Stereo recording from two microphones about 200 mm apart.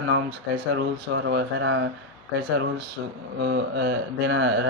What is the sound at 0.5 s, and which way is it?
Speech, 60° right (ahead or behind).